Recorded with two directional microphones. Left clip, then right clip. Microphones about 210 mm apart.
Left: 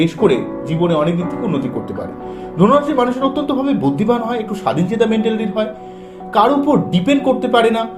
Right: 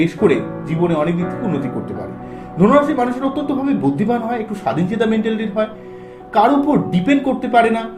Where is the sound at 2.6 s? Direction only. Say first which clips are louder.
Left 1 dB; 15° left (ahead or behind).